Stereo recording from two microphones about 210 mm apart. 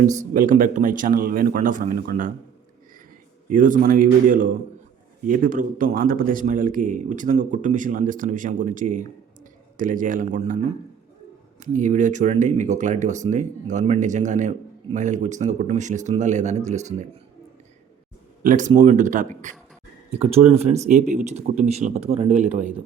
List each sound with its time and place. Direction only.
0.0 s a man's voice: 35° right (ahead or behind)
3.5 s a man's voice: 40° right (ahead or behind)
11.6 s a man's voice: 35° right (ahead or behind)
18.4 s a man's voice: 35° right (ahead or behind)